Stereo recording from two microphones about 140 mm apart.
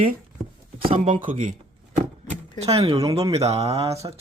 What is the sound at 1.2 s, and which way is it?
Speech, 70° right (ahead or behind).